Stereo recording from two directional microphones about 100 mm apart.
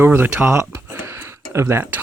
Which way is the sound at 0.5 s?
25° right (ahead or behind).